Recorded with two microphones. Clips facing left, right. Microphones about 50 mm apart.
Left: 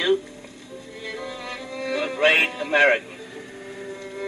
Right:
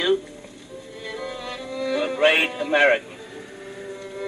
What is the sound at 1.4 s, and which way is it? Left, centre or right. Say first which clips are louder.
Music: right 2 dB; left.